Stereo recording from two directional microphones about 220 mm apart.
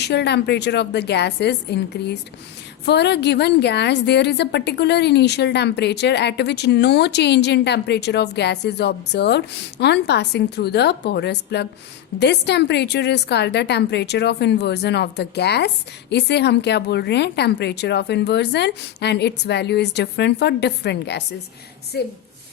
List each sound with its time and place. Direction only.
0.0 s a woman's voice: 50° left (ahead or behind)